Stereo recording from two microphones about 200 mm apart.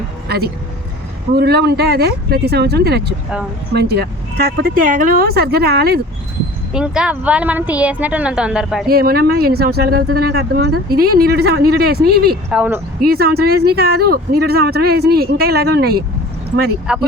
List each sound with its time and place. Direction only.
0.3 s speech: 50° right (ahead or behind)
6.7 s a woman's voice: 5° right (ahead or behind)
8.9 s speech: 50° right (ahead or behind)
12.5 s a woman's voice: 5° right (ahead or behind)
13.0 s speech: 50° right (ahead or behind)
16.9 s speech: 5° right (ahead or behind)